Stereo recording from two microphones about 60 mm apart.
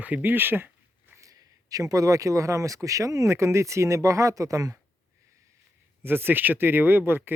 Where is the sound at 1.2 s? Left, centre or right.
Right.